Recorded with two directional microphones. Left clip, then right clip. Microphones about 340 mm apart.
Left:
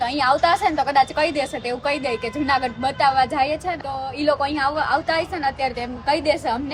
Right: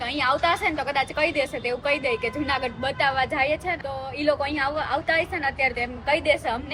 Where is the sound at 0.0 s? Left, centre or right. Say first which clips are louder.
Left 5 dB; centre.